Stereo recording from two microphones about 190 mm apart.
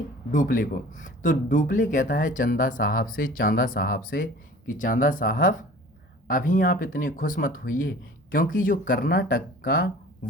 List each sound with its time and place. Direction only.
0.3 s speech: 45° left (ahead or behind)